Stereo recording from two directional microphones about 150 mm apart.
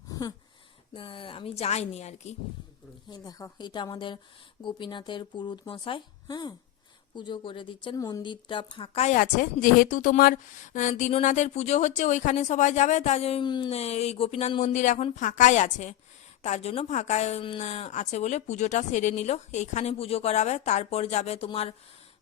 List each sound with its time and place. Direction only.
0.1 s a sound: 25° left (ahead or behind)
0.9 s speech: 35° left (ahead or behind)
3.1 s a woman's voice: 25° left (ahead or behind); by 9.1 s 40° left (ahead or behind)
9.1 s speech: 65° left (ahead or behind); by 13.4 s 45° left (ahead or behind)
13.4 s speech: 30° left (ahead or behind)
13.7 s speech: 45° left (ahead or behind)